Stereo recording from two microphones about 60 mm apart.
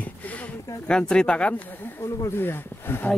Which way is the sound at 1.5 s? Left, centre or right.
Left.